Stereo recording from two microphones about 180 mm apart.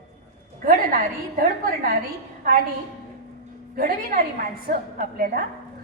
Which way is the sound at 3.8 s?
50° right (ahead or behind).